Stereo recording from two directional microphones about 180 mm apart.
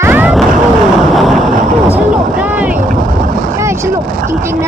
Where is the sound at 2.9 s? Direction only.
50° right (ahead or behind).